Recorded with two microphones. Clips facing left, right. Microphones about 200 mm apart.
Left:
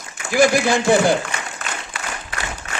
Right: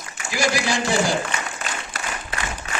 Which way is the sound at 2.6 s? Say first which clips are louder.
Even; 50° left (ahead or behind).